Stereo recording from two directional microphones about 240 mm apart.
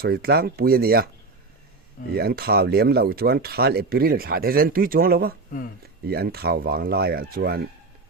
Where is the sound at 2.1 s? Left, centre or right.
Right.